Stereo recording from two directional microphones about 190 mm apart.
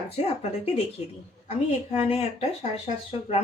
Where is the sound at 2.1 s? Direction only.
30° left (ahead or behind).